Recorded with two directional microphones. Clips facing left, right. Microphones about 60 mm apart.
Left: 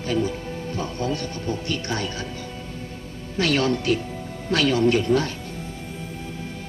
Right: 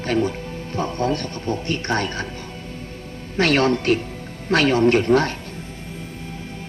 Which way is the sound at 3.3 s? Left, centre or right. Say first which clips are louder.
Right 4 dB; right.